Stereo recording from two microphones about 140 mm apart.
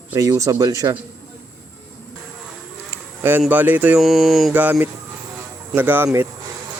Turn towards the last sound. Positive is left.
turn(degrees=-15)  # may be behind; listen again after turning